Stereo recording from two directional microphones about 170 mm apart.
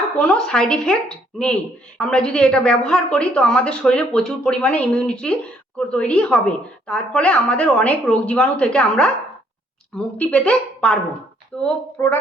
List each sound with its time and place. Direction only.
0.2 s a woman's voice: 5° left (ahead or behind)